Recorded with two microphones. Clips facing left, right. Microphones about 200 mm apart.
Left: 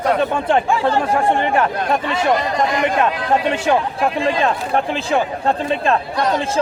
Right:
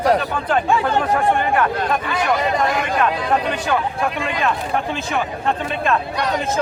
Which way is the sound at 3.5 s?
25° left (ahead or behind).